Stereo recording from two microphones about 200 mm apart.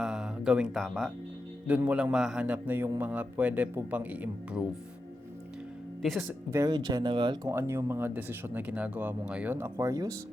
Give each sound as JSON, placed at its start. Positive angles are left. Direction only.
{"t": 0.0, "sound": "music", "side_deg": -5}
{"t": 1.6, "sound": "a man's voice", "side_deg": -5}
{"t": 6.0, "sound": "speech", "side_deg": 0}
{"t": 6.5, "sound": "speech", "side_deg": -20}
{"t": 7.5, "sound": "a man's voice", "side_deg": -10}